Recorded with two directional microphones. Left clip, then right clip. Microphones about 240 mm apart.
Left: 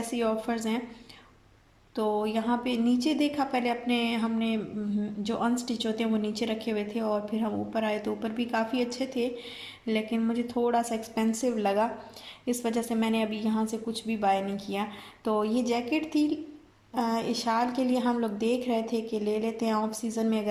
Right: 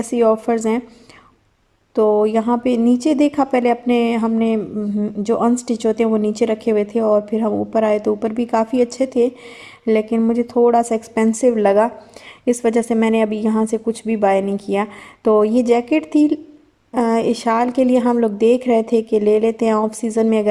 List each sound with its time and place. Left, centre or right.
0.0 s a woman's voice: right
2.0 s a woman's voice: right